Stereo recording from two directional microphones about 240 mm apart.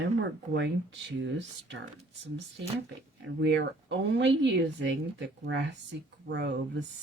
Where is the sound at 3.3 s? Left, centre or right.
Right.